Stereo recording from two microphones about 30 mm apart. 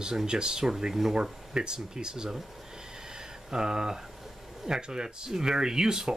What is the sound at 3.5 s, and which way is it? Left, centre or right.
Speech, right.